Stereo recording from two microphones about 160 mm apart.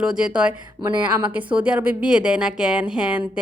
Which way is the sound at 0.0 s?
5° right (ahead or behind).